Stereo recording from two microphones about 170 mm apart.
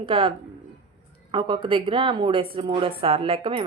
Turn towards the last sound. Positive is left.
turn(degrees=-30)  # may be behind; listen again after turning